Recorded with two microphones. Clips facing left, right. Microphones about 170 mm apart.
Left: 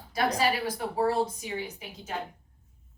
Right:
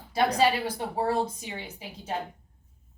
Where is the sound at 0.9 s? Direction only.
25° right (ahead or behind).